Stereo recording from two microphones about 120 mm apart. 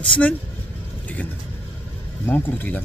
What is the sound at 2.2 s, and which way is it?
Speech, 15° left (ahead or behind).